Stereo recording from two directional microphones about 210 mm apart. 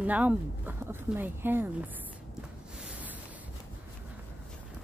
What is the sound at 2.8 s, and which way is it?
Boat, 5° right (ahead or behind).